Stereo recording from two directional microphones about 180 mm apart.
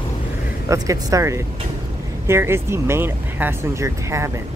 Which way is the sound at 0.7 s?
20° right (ahead or behind).